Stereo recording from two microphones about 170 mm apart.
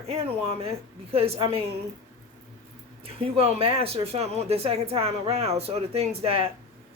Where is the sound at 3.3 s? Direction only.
35° right (ahead or behind).